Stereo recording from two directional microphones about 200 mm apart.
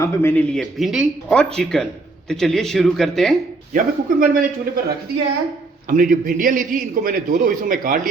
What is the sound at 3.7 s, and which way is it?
Speech, 40° right (ahead or behind).